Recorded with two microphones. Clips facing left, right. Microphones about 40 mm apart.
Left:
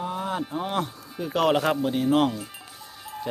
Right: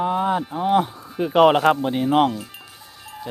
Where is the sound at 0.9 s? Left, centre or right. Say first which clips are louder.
Right 4 dB; right.